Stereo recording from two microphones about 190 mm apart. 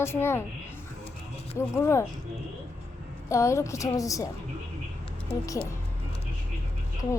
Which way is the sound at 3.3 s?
15° left (ahead or behind).